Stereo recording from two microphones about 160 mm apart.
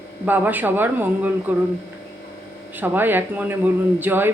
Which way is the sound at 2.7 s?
10° right (ahead or behind).